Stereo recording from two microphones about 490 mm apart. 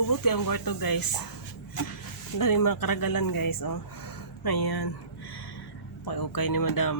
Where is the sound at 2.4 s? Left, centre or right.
Left.